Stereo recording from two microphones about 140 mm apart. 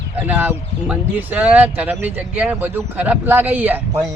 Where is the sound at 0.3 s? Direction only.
10° right (ahead or behind).